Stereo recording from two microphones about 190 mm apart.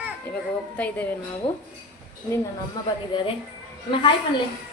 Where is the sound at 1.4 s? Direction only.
30° left (ahead or behind).